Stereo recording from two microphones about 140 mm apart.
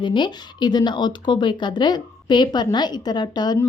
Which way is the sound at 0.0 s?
35° left (ahead or behind).